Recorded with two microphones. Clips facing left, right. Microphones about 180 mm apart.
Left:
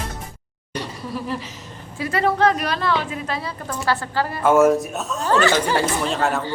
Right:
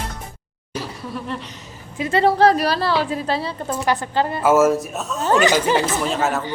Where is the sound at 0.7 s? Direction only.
Centre (ahead or behind).